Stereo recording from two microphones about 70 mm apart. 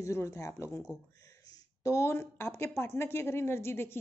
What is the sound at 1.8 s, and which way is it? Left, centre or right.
Speech, left.